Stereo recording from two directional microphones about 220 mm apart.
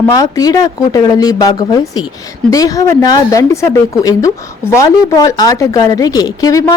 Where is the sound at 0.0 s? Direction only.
15° left (ahead or behind).